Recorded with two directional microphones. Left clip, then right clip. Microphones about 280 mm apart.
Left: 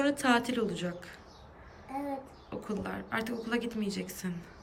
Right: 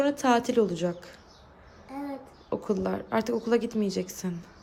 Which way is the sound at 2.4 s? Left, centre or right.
Centre.